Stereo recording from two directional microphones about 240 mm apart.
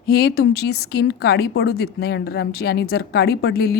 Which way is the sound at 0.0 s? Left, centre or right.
Left.